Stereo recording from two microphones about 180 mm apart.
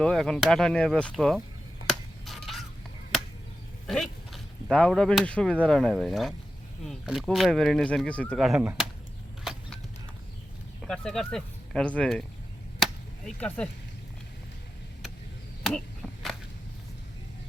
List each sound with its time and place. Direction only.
0.0 s speech: 5° left (ahead or behind)
1.9 s a sound: centre (ahead or behind)
3.8 s speech: centre (ahead or behind)
9.4 s vehicle: centre (ahead or behind)
10.8 s speech: 5° left (ahead or behind)
12.8 s chop: 5° left (ahead or behind)